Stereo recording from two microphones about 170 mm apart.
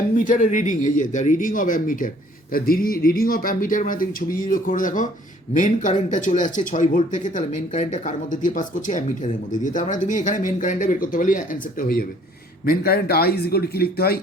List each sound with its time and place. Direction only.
0.2 s a man's voice: 50° left (ahead or behind); by 14.2 s 65° left (ahead or behind)